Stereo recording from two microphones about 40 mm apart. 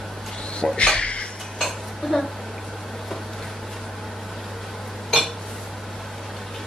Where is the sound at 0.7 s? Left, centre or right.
Left.